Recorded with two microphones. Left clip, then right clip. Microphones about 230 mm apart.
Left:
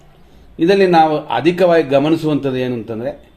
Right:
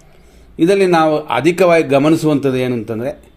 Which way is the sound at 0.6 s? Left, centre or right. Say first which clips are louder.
Left 1 dB; right.